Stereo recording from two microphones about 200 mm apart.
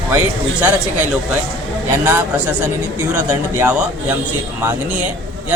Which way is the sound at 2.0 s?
10° right (ahead or behind).